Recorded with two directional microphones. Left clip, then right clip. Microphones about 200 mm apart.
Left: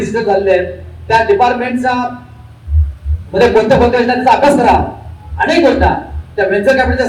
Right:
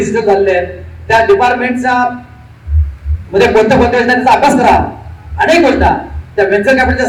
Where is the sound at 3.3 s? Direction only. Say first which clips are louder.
Right 1 dB; 45° right (ahead or behind).